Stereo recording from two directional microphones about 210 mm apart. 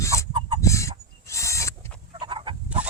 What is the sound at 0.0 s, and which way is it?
Chicken, 15° left (ahead or behind).